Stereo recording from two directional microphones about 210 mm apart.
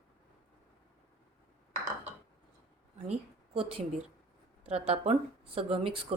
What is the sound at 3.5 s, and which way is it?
A woman's voice, 25° right (ahead or behind).